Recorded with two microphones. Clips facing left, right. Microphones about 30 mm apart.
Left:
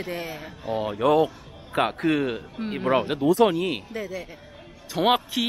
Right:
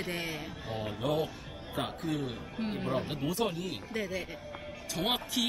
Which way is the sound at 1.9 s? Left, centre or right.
Left.